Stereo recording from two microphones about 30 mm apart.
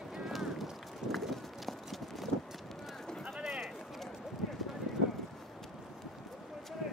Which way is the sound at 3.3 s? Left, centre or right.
Centre.